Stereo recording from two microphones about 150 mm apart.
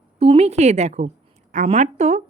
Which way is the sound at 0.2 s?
40° right (ahead or behind).